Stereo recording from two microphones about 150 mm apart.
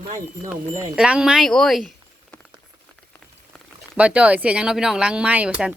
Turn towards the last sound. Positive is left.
turn(degrees=-10)  # may be behind; listen again after turning